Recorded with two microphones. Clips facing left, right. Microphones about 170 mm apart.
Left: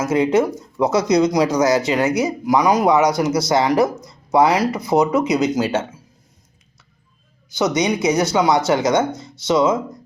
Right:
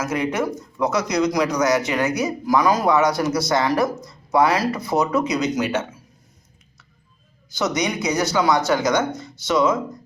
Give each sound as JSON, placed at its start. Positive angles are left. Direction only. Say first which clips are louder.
{"t": 0.0, "sound": "speech", "louder": "left 6 dB", "side_deg": 25}
{"t": 7.6, "sound": "speech", "louder": "left 5 dB", "side_deg": 25}